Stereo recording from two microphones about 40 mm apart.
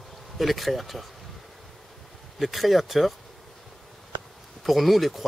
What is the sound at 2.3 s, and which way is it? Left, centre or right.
Speech, centre.